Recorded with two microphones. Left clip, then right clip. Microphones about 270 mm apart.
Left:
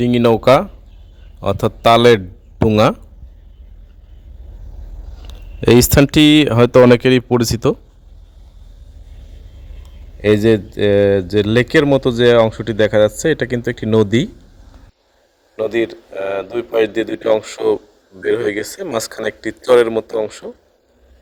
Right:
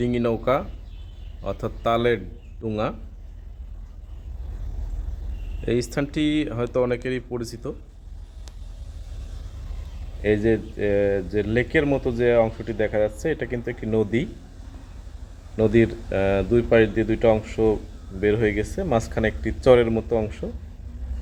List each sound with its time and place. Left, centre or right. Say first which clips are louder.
0.0 s speech: left 11 dB; left
5.6 s speech: left 14 dB; left
10.2 s speech: left 8 dB; left
15.5 s speech: left 2 dB; centre
16.8 s speech: left 3 dB; left